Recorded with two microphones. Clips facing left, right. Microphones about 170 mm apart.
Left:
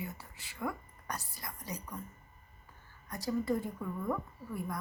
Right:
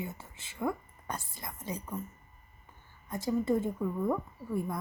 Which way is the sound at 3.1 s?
25° right (ahead or behind).